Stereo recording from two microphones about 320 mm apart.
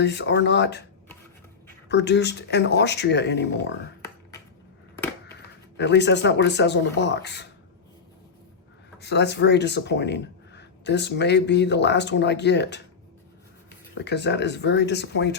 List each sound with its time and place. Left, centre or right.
0.0 s speech: left
1.9 s speech: left
5.7 s speech: left
9.0 s speech: left
13.9 s speech: left